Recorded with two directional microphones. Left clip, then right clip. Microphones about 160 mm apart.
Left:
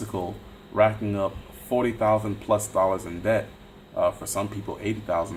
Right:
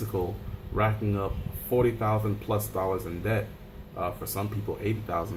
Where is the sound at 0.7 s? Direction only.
50° left (ahead or behind).